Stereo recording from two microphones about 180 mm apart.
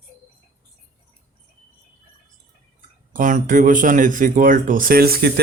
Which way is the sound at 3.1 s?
45° right (ahead or behind).